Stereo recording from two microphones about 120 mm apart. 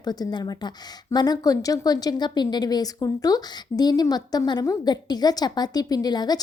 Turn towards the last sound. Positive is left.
turn(degrees=35)  # may be behind; listen again after turning